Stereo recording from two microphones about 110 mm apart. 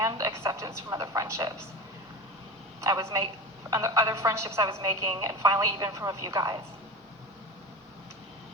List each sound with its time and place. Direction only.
0.0 s a woman's voice: 30° right (ahead or behind)
2.8 s a man's voice: 30° right (ahead or behind)